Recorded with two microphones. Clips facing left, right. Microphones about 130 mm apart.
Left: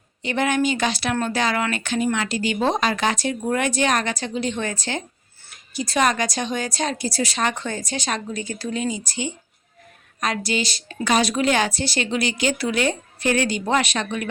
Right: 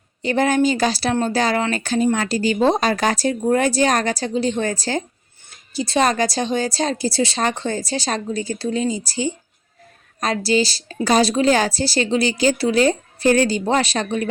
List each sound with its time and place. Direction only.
0.2 s a woman's voice: 35° right (ahead or behind)